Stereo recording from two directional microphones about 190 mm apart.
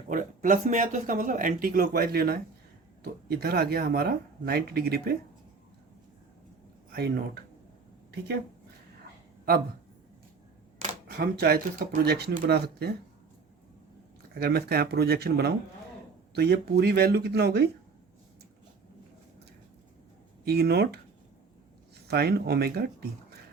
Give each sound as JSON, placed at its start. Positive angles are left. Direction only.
{"t": 0.1, "sound": "speech", "side_deg": -45}
{"t": 10.8, "sound": "speech", "side_deg": -50}
{"t": 14.3, "sound": "speech", "side_deg": -55}
{"t": 20.4, "sound": "speech", "side_deg": -55}
{"t": 22.0, "sound": "speech", "side_deg": -55}